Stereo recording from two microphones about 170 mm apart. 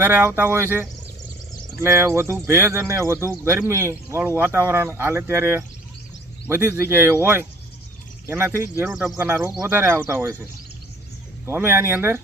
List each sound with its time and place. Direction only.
0.0 s speech: 15° right (ahead or behind)
11.4 s speech: 15° right (ahead or behind)